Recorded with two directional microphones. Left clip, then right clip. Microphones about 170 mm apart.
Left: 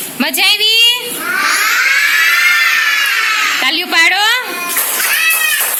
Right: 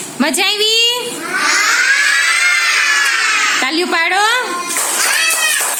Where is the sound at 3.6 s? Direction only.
10° right (ahead or behind).